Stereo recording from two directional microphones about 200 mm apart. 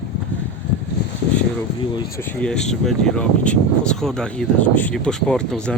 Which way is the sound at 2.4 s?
5° left (ahead or behind).